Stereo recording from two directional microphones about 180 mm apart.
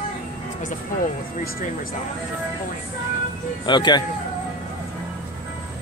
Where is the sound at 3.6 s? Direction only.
25° left (ahead or behind).